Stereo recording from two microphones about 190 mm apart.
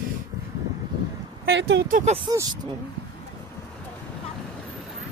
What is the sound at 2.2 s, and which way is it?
Speech, 25° right (ahead or behind).